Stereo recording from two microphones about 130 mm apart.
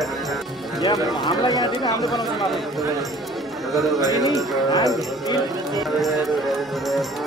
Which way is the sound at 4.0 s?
30° right (ahead or behind).